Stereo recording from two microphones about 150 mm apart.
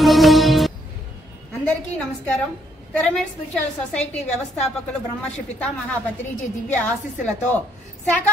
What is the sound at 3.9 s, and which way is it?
Speech, 10° left (ahead or behind).